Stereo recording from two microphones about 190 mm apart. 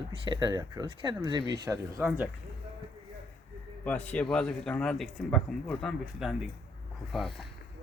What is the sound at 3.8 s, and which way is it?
A man's voice, 10° left (ahead or behind).